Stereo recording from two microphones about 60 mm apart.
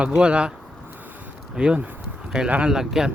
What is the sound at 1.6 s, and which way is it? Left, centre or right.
Speech, centre.